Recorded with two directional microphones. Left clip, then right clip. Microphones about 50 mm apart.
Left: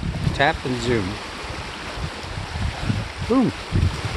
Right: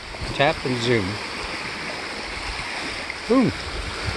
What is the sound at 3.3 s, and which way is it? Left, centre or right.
Speech, left.